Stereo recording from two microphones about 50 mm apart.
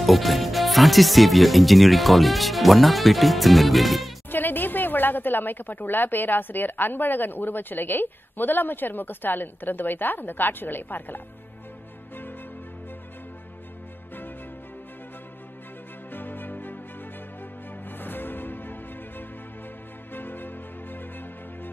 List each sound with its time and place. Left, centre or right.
0.0 s speech: centre
4.3 s a woman's voice: left
16.1 s music: left
17.8 s music: left